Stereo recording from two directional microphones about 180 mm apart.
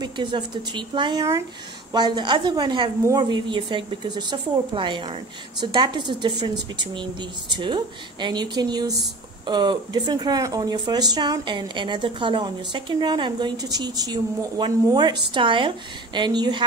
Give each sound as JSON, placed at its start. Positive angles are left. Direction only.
{"t": 0.0, "sound": "speech", "side_deg": -25}